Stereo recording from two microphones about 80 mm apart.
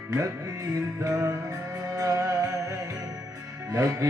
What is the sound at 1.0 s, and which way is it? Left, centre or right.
Music, right.